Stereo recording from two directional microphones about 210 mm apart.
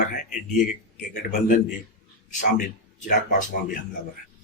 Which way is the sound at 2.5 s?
35° left (ahead or behind).